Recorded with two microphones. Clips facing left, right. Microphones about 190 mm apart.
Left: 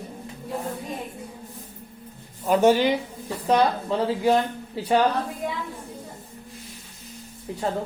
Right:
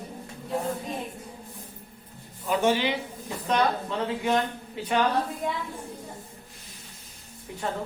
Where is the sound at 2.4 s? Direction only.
40° left (ahead or behind).